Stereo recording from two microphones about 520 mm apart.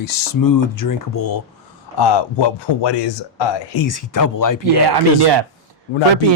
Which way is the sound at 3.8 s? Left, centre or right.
Left.